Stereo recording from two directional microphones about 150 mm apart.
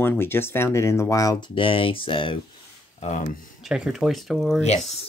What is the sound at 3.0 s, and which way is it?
Speech, 50° left (ahead or behind).